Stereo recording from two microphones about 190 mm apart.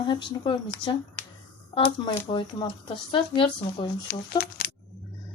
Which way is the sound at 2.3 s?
25° left (ahead or behind).